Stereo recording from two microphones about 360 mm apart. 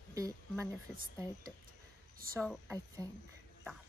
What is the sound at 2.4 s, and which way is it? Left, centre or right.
Speech, centre.